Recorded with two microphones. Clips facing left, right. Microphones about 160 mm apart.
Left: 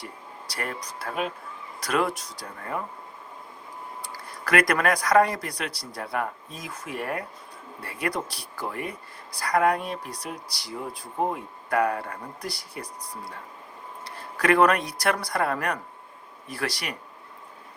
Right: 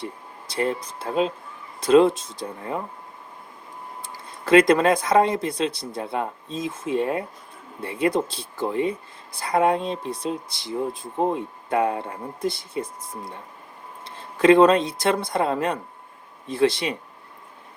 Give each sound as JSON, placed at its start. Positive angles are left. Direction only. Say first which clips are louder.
{"t": 0.0, "sound": "speech", "louder": "right 5 dB", "side_deg": -25}
{"t": 4.0, "sound": "speech", "louder": "right 3 dB", "side_deg": -25}